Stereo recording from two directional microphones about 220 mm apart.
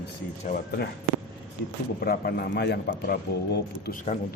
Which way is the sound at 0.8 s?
45° left (ahead or behind).